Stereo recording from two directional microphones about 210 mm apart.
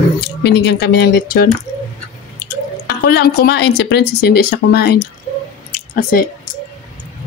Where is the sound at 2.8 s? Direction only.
50° left (ahead or behind).